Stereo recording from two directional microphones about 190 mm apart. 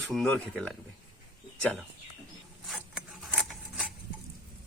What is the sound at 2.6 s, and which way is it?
Zipper, centre (ahead or behind).